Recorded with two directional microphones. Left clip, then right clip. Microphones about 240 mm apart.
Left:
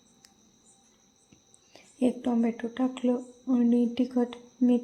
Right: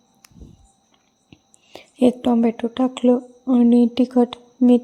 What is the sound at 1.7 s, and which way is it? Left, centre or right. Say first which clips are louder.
Speech: right 11 dB; right.